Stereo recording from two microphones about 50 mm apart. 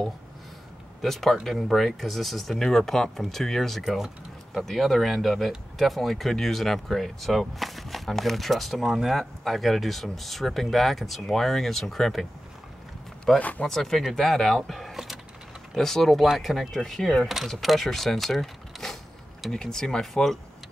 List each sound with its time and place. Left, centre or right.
1.0 s speech: centre
3.8 s speech: centre
4.6 s speech: centre
9.2 s speech: centre
13.4 s speech: left
13.7 s speech: centre